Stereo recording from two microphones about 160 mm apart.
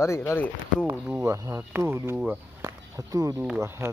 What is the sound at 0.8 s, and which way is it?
Speech, 10° right (ahead or behind).